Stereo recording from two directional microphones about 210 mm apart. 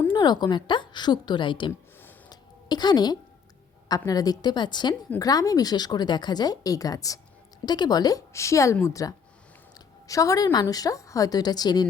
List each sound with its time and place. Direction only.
0.1 s a woman's voice: 20° left (ahead or behind)
2.0 s a sound: 15° left (ahead or behind)
3.8 s a woman's voice: 20° left (ahead or behind)